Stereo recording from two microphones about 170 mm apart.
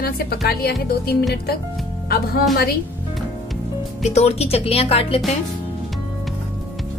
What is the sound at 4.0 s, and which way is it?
Speech, 40° left (ahead or behind).